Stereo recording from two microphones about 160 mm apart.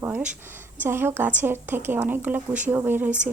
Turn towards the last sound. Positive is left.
turn(degrees=-10)  # may be behind; listen again after turning